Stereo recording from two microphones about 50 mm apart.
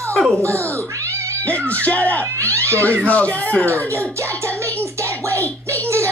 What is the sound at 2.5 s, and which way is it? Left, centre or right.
Cat, right.